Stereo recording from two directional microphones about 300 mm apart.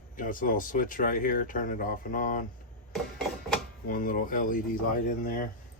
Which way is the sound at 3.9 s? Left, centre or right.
Left.